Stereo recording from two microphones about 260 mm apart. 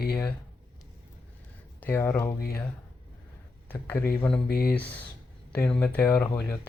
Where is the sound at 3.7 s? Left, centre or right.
Centre.